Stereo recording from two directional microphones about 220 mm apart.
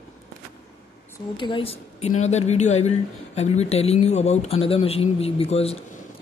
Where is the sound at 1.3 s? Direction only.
20° left (ahead or behind).